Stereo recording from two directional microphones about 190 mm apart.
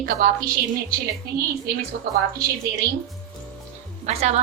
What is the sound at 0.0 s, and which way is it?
Speech, 50° right (ahead or behind).